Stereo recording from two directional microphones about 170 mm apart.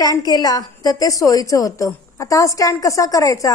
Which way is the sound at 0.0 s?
20° left (ahead or behind).